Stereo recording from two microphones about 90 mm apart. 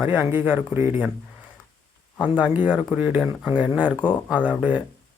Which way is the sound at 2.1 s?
15° right (ahead or behind).